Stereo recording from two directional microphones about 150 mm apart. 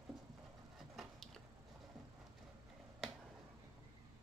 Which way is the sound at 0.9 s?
Centre (ahead or behind).